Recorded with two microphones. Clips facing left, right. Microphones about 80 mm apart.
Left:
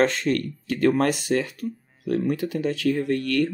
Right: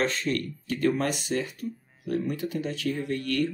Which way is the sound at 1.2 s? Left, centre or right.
Left.